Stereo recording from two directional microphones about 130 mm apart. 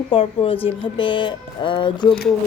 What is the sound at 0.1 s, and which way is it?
A woman's voice, 45° left (ahead or behind).